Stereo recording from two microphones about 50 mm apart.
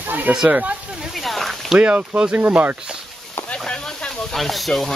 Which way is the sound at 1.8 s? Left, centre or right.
Right.